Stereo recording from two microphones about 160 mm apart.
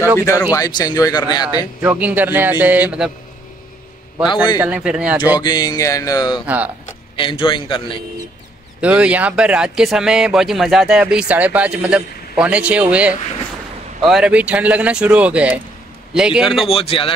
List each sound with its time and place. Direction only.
0.2 s speech: 20° left (ahead or behind)
1.8 s speech: 10° right (ahead or behind)
4.6 s speech: 10° right (ahead or behind)
5.4 s speech: 25° left (ahead or behind)
6.4 s speech: 10° right (ahead or behind)
7.2 s a man's voice: 30° left (ahead or behind)
8.8 s a man's voice: 10° right (ahead or behind)
16.6 s a man's voice: 35° left (ahead or behind)